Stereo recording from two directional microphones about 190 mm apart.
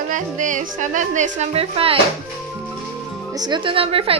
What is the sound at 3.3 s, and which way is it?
Speech, 20° right (ahead or behind).